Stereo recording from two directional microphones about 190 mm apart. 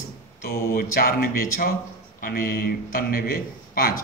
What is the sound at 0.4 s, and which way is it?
A man's voice, 50° left (ahead or behind).